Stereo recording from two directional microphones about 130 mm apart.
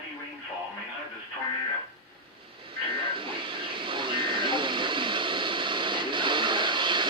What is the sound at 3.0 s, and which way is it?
Vehicle, 40° right (ahead or behind).